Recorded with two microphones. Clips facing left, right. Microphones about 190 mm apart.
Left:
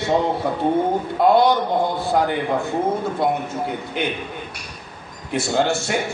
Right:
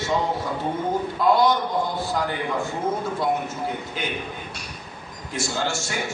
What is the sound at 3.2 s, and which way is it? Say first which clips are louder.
Speech: left 3 dB; 60° left (ahead or behind).